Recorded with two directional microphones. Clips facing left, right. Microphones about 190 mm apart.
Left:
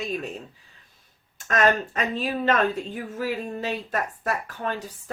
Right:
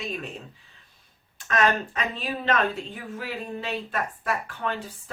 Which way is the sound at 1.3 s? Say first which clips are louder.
Left 2 dB; 45° left (ahead or behind).